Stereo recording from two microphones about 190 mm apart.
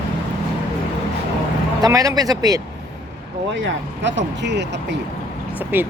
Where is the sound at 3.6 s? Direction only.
70° right (ahead or behind).